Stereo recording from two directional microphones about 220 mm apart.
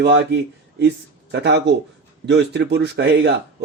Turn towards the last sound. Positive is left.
turn(degrees=-50)  # may be behind; listen again after turning